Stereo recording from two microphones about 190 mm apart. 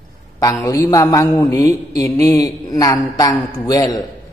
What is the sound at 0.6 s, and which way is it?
Mantra, 15° left (ahead or behind).